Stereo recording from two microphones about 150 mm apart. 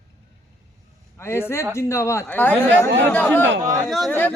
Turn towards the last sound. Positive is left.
turn(degrees=10)  # may be behind; listen again after turning